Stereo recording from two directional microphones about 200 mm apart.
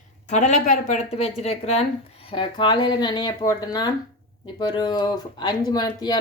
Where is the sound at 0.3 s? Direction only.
35° left (ahead or behind).